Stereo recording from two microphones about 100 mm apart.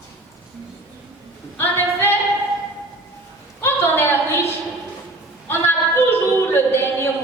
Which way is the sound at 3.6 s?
25° left (ahead or behind).